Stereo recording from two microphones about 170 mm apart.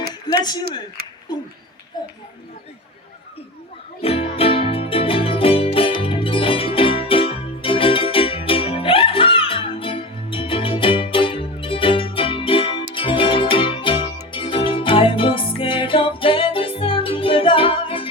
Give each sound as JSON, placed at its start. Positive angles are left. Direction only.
{"t": 0.3, "sound": "speech", "side_deg": 25}
{"t": 1.0, "sound": "a sound", "side_deg": -65}
{"t": 2.0, "sound": "speech", "side_deg": 25}
{"t": 4.0, "sound": "music", "side_deg": 35}